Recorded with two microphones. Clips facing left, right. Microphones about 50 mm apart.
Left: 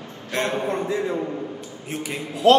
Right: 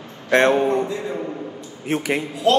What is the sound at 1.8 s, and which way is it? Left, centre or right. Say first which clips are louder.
Speech: right 9 dB; right.